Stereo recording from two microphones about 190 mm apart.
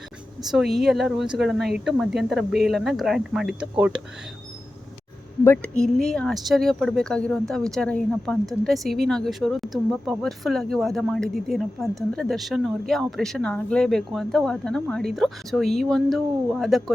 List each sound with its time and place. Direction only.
0.4 s speech: centre (ahead or behind)
5.4 s speech: 10° left (ahead or behind)